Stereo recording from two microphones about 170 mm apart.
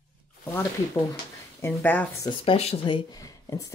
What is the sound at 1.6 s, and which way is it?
Speech, 10° left (ahead or behind).